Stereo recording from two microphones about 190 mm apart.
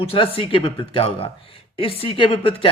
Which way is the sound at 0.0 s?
30° left (ahead or behind).